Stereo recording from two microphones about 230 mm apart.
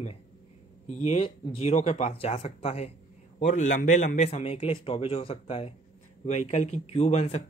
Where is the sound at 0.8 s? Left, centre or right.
Left.